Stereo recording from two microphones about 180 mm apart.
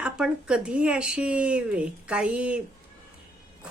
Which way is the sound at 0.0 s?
5° right (ahead or behind).